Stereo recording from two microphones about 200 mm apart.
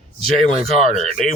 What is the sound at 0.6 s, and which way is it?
Speech, 30° right (ahead or behind).